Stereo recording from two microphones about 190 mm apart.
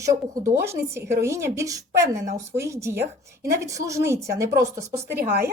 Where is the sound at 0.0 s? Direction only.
15° right (ahead or behind).